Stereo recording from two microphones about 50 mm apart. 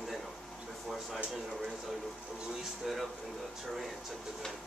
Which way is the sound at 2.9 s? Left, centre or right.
Centre.